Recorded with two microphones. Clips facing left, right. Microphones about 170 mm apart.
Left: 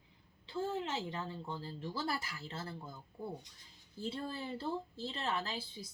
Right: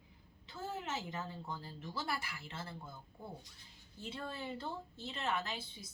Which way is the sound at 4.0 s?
35° left (ahead or behind).